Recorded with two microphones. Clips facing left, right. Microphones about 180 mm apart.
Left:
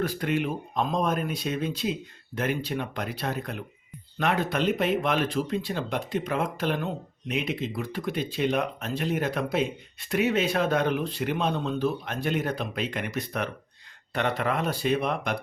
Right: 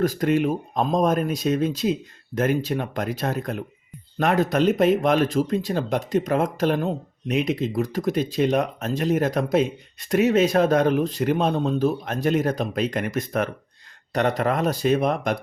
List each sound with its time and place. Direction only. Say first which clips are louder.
0.0 s speech: right 6 dB; 40° right (ahead or behind)